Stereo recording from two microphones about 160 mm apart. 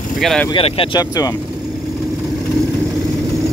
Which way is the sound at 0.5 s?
35° left (ahead or behind).